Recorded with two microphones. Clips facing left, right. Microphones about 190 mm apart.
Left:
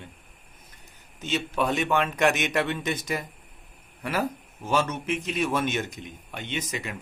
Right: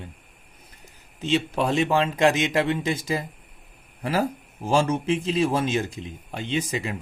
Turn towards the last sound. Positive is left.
turn(degrees=-30)  # may be behind; listen again after turning